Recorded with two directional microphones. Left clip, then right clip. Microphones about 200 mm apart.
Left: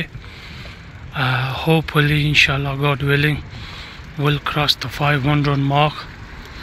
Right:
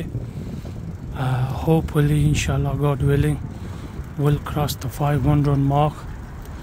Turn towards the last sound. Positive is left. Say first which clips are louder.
# left 3 dB
turn(degrees=-10)  # may be behind; listen again after turning